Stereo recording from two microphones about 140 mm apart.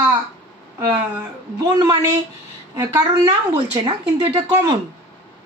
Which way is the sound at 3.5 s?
30° right (ahead or behind).